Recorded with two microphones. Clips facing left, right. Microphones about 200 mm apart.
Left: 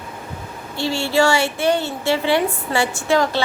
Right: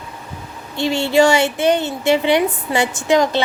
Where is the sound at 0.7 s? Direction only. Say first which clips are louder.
Right 4 dB; 20° right (ahead or behind).